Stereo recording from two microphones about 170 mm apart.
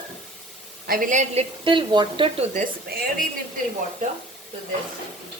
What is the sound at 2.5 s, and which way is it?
Speech, 55° right (ahead or behind).